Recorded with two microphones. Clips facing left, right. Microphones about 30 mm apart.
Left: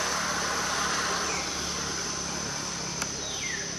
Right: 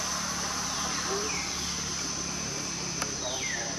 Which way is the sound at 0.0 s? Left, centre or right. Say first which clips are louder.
Left 4 dB; left.